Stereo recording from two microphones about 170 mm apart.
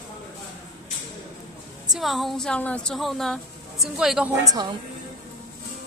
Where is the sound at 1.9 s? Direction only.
Centre (ahead or behind).